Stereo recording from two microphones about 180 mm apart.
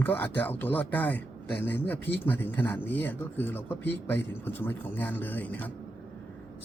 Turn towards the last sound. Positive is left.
turn(degrees=10)  # may be behind; listen again after turning